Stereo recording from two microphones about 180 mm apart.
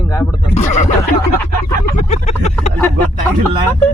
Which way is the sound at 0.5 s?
40° left (ahead or behind).